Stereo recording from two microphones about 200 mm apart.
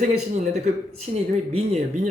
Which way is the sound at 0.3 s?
35° right (ahead or behind).